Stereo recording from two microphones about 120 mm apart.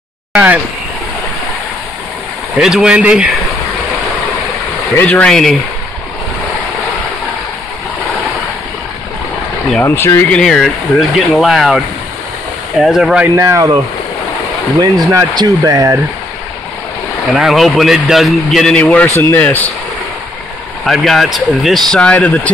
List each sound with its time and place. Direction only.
0.3 s speech: 10° right (ahead or behind)
2.6 s speech: 5° right (ahead or behind)
5.0 s a man's voice: 10° left (ahead or behind)
9.8 s speech: 20° left (ahead or behind)
10.3 s a man's voice: 5° left (ahead or behind)
13.4 s speech: 25° right (ahead or behind)
14.8 s speech: 30° right (ahead or behind)
17.3 s a man's voice: 5° right (ahead or behind); by 19.7 s 15° left (ahead or behind)
20.8 s a man's voice: centre (ahead or behind)